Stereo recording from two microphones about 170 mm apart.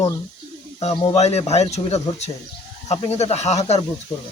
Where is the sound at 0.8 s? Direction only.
35° left (ahead or behind).